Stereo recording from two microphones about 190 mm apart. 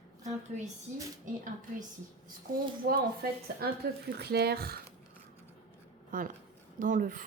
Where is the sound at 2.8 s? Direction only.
55° right (ahead or behind).